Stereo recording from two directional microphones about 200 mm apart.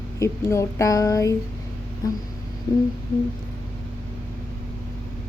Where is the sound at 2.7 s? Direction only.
20° left (ahead or behind).